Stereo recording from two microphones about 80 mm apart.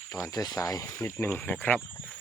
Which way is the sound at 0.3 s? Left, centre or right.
Left.